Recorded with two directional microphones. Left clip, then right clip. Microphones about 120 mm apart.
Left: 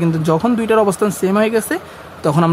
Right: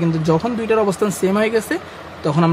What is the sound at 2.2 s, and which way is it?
Speech, 40° left (ahead or behind).